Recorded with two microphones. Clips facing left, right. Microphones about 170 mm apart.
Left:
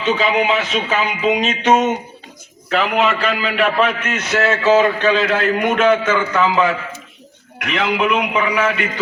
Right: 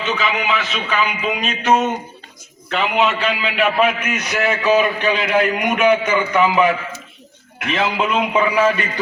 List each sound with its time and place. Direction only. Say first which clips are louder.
0.0 s speech: left 5 dB; 30° left (ahead or behind)
2.6 s a man's voice: left 1 dB; centre (ahead or behind); by 8.7 s 30° right (ahead or behind)